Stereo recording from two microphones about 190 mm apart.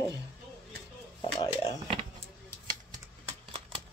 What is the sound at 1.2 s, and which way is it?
Speech, 25° left (ahead or behind).